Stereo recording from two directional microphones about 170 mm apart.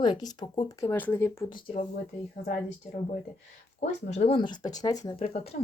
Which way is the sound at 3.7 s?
40° left (ahead or behind).